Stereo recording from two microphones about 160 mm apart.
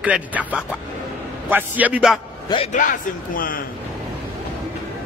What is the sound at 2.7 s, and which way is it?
Speech, 55° left (ahead or behind).